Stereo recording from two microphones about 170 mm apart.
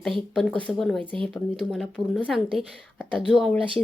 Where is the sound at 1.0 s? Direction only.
30° right (ahead or behind).